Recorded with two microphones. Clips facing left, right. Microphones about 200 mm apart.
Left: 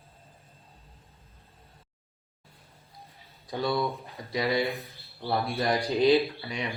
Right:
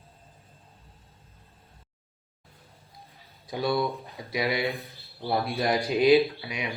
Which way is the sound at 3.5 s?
10° right (ahead or behind).